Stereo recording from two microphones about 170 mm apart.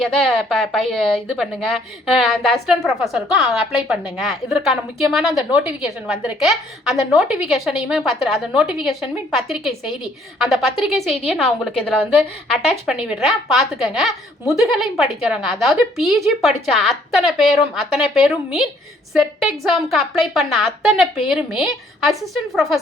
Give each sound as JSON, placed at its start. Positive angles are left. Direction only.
{"t": 0.0, "sound": "a woman's voice", "side_deg": 0}
{"t": 12.8, "sound": "a woman's voice", "side_deg": -5}